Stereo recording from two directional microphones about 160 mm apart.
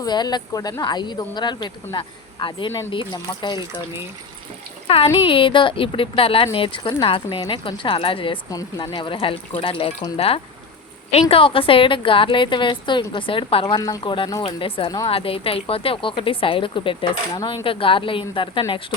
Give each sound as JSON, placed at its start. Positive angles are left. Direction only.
{"t": 0.0, "sound": "speech", "side_deg": 25}
{"t": 5.2, "sound": "speech", "side_deg": 35}